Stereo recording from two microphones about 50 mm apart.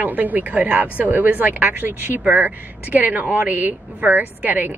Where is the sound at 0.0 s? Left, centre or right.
Right.